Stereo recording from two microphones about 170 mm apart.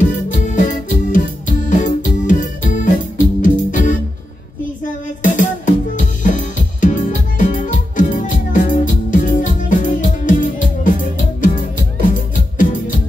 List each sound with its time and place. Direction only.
0.0 s music: 45° left (ahead or behind)
5.2 s music: 50° left (ahead or behind)